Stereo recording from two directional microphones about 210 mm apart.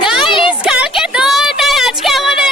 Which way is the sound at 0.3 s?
25° left (ahead or behind).